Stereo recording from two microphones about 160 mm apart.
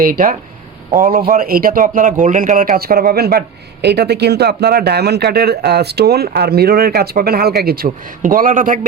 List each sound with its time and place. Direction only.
0.0 s speech: 65° right (ahead or behind)